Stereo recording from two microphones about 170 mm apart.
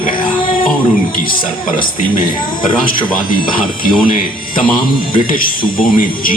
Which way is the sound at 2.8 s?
55° left (ahead or behind).